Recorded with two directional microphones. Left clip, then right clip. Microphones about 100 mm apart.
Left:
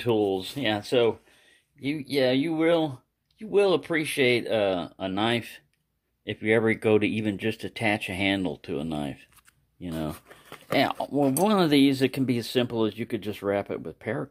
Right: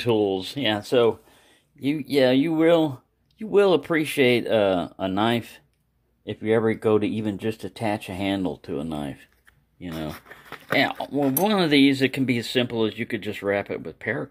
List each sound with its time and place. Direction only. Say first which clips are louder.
0.0 s speech: right 3 dB; centre (ahead or behind)
1.8 s speech: right 5 dB; 30° right (ahead or behind); by 5.6 s 15° right (ahead or behind)
6.2 s speech: right 1 dB; 5° left (ahead or behind)
8.7 s speech: right 1 dB; 20° left (ahead or behind)
9.8 s speech: even; 45° left (ahead or behind)
10.5 s speech: right 2 dB; 35° left (ahead or behind)